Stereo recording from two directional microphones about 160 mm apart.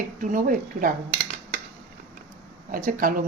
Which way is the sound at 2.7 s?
60° right (ahead or behind).